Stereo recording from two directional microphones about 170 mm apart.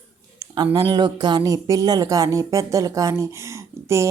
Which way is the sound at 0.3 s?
25° right (ahead or behind).